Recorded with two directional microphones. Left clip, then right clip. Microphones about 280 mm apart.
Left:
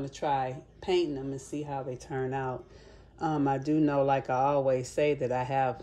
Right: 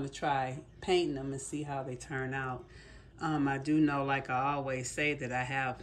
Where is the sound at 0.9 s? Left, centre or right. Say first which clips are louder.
Left 2 dB; centre.